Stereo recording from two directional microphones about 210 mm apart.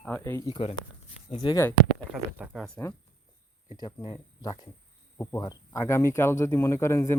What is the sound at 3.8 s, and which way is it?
Speech, 20° left (ahead or behind).